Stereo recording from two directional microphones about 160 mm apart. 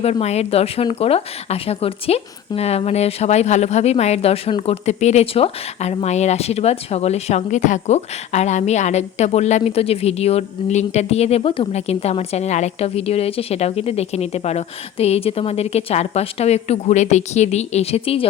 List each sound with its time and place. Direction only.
0.0 s speech: 40° left (ahead or behind)